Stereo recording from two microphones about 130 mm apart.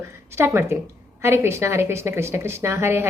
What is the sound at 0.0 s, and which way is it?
A woman's voice, 20° right (ahead or behind).